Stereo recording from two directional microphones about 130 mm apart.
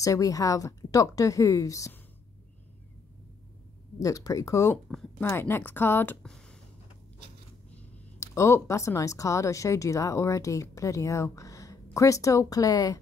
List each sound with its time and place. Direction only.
0.0 s a woman's voice: 25° left (ahead or behind)
4.0 s a woman's voice: 25° left (ahead or behind)
6.2 s a sound: 5° left (ahead or behind)
8.2 s a woman's voice: 20° left (ahead or behind)